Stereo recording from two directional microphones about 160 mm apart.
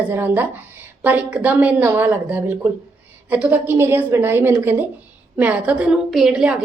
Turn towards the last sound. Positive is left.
turn(degrees=-5)  # may be behind; listen again after turning